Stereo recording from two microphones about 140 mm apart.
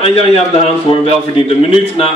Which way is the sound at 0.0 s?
45° left (ahead or behind).